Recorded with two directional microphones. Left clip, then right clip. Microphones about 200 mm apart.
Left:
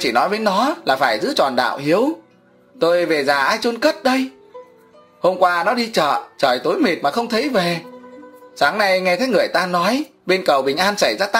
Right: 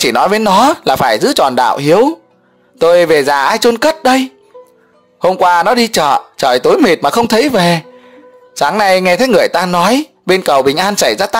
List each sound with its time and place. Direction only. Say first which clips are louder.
0.0 s speech: right 7 dB; 55° right (ahead or behind)